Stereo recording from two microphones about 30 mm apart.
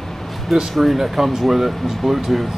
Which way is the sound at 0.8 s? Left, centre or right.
Centre.